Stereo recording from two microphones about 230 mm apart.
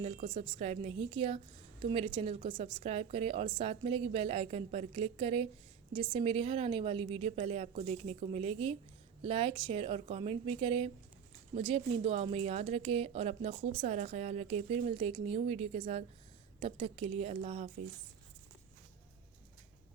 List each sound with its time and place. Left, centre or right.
0.0 s a woman's voice: right